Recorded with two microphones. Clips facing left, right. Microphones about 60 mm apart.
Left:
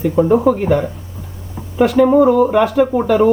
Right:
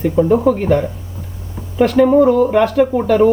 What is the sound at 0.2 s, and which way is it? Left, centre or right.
Speech, centre.